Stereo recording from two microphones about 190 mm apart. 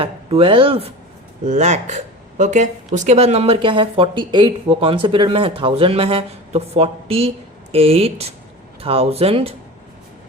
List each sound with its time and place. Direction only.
0.0 s speech: 30° right (ahead or behind)